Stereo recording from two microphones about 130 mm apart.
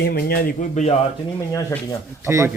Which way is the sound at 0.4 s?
65° left (ahead or behind).